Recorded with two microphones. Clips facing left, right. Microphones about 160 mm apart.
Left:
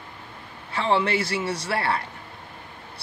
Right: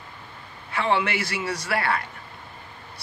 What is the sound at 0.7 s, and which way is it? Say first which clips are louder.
A man's voice: left 1 dB; 30° left (ahead or behind).